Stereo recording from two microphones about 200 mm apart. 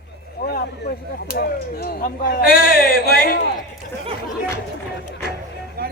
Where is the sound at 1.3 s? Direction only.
50° left (ahead or behind).